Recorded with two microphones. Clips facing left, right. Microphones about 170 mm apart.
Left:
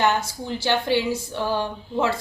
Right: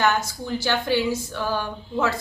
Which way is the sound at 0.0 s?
30° left (ahead or behind).